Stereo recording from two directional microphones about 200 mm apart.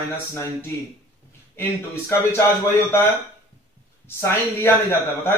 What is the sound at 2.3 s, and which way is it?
Speech, 10° left (ahead or behind).